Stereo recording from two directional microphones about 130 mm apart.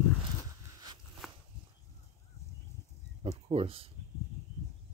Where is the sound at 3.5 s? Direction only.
50° right (ahead or behind).